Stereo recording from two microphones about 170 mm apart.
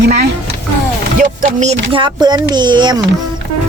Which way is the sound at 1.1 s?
45° right (ahead or behind).